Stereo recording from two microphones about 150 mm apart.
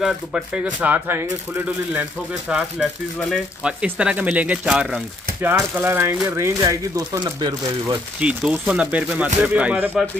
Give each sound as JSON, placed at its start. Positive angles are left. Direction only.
{"t": 0.7, "sound": "speech", "side_deg": -10}
{"t": 8.2, "sound": "speech", "side_deg": -10}